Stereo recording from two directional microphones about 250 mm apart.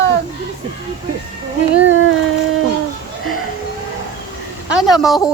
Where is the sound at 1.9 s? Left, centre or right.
Right.